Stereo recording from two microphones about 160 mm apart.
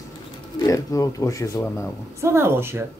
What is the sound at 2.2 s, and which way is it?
Speech, 15° right (ahead or behind).